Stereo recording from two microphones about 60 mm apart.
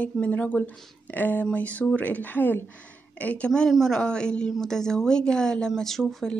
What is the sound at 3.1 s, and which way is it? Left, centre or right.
A woman's voice, left.